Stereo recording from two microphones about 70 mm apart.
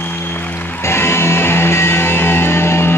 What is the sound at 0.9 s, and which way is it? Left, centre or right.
Music, left.